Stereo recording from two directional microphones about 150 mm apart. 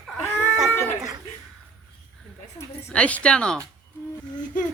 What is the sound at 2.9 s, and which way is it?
Speech, 10° left (ahead or behind).